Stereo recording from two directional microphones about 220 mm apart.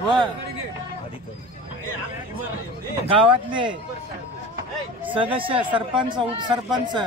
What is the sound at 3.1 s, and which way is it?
Speech, 25° right (ahead or behind).